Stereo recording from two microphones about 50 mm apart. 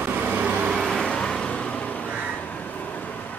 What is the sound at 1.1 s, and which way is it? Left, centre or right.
Vehicle, centre.